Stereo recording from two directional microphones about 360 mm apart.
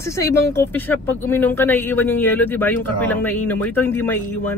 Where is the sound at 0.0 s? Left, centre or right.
Centre.